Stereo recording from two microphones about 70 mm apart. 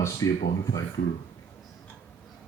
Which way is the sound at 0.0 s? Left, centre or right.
Left.